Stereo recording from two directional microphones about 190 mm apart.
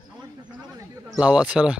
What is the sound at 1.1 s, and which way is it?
Speech, 5° right (ahead or behind).